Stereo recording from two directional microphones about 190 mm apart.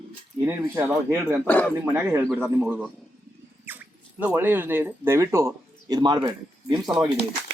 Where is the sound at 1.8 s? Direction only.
15° right (ahead or behind).